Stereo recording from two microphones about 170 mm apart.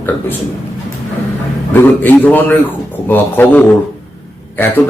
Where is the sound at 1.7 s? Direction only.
10° left (ahead or behind).